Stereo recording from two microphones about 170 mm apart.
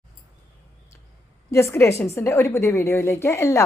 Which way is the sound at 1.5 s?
15° left (ahead or behind).